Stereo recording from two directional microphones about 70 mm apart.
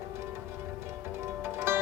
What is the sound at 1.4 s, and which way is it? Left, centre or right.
Music, right.